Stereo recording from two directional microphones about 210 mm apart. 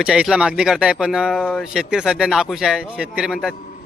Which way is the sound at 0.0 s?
5° right (ahead or behind).